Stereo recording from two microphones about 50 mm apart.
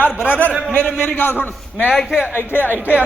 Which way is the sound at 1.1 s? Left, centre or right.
Left.